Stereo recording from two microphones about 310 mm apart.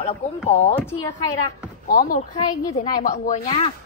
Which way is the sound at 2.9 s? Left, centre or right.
Left.